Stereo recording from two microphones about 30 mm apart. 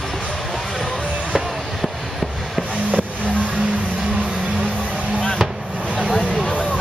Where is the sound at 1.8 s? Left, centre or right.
Centre.